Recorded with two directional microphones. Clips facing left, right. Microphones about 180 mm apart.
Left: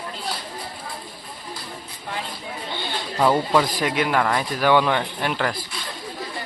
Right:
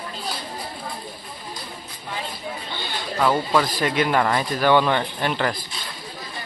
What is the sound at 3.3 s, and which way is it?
Speech, 10° left (ahead or behind).